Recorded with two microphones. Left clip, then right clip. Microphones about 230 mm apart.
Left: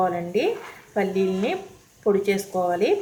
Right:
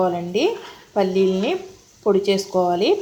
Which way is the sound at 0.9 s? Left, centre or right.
Right.